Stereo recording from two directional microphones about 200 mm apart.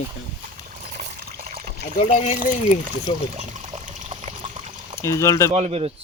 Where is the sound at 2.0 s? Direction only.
35° left (ahead or behind).